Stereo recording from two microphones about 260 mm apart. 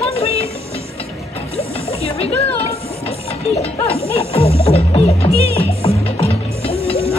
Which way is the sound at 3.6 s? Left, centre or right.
Left.